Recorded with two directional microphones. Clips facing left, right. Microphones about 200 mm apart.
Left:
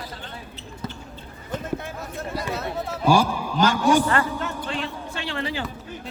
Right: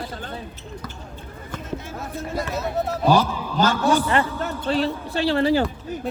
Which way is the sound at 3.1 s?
10° left (ahead or behind).